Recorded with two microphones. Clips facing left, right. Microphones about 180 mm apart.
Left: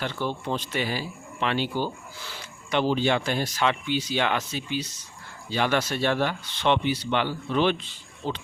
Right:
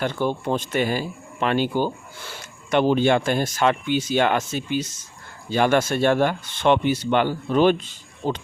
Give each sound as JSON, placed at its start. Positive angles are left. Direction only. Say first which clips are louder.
{"t": 0.0, "sound": "speech", "louder": "right 6 dB", "side_deg": -50}